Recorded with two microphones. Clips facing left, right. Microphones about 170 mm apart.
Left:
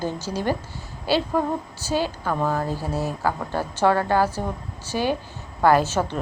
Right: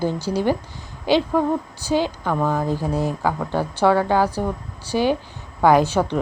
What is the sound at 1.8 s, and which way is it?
Speech, 15° right (ahead or behind).